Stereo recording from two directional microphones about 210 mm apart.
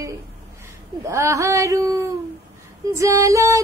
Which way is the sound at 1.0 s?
15° right (ahead or behind).